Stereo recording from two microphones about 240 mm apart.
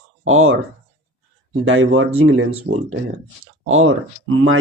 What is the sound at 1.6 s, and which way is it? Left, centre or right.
Speech, right.